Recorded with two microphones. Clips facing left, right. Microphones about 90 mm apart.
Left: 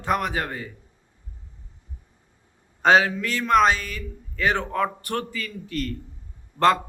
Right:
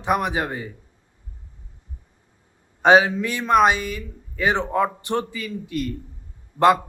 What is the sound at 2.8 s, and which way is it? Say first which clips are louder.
A man's voice: right 3 dB; 15° right (ahead or behind).